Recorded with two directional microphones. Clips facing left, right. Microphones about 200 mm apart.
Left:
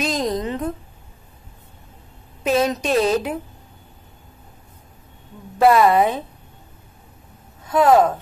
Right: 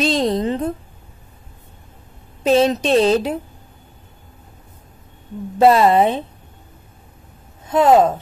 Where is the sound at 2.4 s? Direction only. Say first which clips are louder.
Right 4 dB; 30° right (ahead or behind).